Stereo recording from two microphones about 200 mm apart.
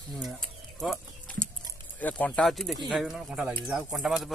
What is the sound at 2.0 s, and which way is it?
Speech, 5° left (ahead or behind).